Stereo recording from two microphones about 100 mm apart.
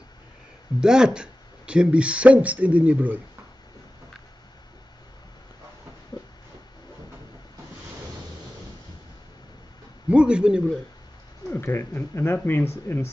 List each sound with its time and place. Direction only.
0.7 s speech: 5° right (ahead or behind)
10.0 s a sound: 10° right (ahead or behind)
11.5 s speech: 25° left (ahead or behind)